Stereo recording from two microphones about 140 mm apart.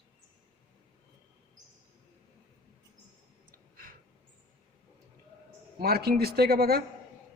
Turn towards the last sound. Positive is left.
turn(degrees=-90)